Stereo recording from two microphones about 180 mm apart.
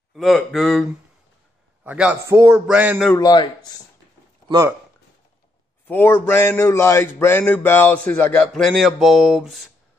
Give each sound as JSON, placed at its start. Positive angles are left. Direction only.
{"t": 0.1, "sound": "speech", "side_deg": 0}
{"t": 1.9, "sound": "a man's voice", "side_deg": -10}
{"t": 3.2, "sound": "speech", "side_deg": 25}
{"t": 4.5, "sound": "speech", "side_deg": -20}
{"t": 5.9, "sound": "speech", "side_deg": 10}